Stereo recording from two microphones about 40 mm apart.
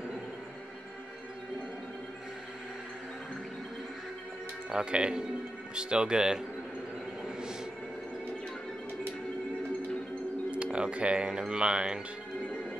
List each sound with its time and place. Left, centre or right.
4.6 s speech: right
10.5 s speech: right